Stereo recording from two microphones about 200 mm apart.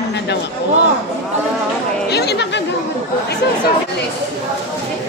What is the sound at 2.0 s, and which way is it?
Speech, 55° left (ahead or behind).